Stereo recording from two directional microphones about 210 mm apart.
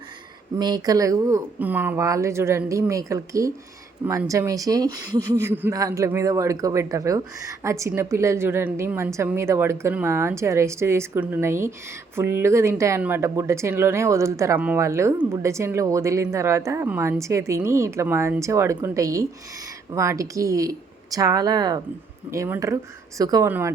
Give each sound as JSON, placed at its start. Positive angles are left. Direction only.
{"t": 0.5, "sound": "speech", "side_deg": -20}